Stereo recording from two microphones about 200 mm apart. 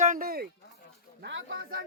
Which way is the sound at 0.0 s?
45° right (ahead or behind).